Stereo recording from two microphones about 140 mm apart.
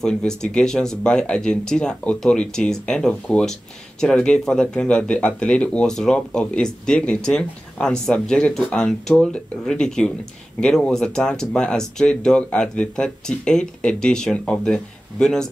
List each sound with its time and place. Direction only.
0.0 s speech: 5° left (ahead or behind)